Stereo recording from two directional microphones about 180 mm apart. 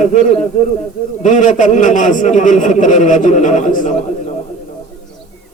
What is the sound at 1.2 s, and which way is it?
A man's voice, 45° left (ahead or behind).